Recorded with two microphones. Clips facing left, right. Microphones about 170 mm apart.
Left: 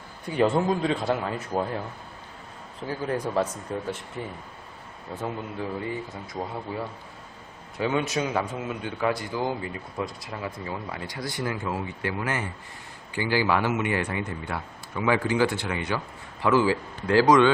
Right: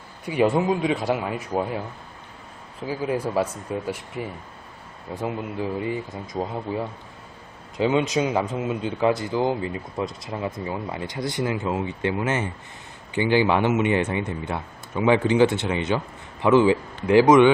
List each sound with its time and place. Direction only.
0.3 s speech: 10° right (ahead or behind)
2.8 s speech: 10° right (ahead or behind)
5.8 s a man's voice: 20° right (ahead or behind)